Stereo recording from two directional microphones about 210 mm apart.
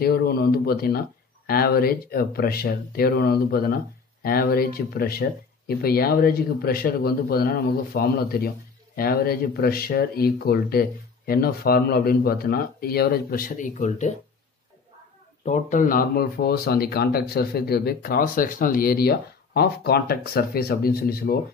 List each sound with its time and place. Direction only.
0.0 s speech: 45° left (ahead or behind)
15.4 s speech: 35° left (ahead or behind)